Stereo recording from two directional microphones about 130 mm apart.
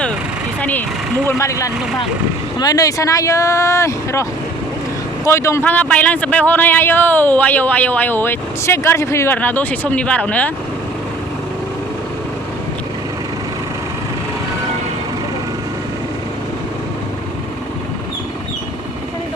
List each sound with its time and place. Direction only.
0.6 s speech: 15° left (ahead or behind)